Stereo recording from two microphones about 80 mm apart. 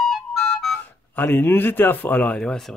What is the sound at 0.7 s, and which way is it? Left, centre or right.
Speech, left.